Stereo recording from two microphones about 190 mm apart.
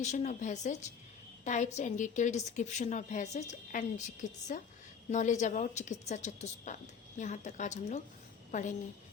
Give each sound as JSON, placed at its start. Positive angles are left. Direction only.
{"t": 0.0, "sound": "a woman's voice", "side_deg": 40}